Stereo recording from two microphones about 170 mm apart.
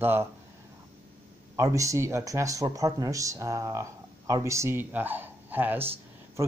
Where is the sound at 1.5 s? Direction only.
20° right (ahead or behind).